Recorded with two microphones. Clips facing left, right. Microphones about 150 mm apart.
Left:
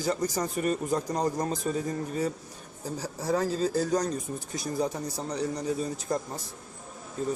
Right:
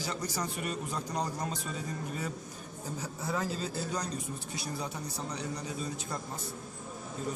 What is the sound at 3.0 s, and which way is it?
Speech, 35° left (ahead or behind).